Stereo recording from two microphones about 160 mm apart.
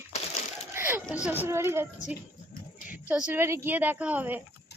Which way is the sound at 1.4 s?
15° right (ahead or behind).